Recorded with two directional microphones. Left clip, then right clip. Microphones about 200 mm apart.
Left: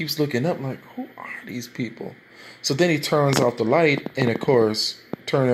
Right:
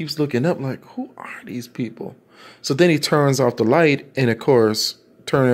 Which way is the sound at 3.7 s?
50° right (ahead or behind).